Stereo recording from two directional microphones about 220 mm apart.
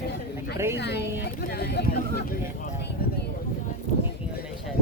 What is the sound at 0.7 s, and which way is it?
Speech, 50° left (ahead or behind).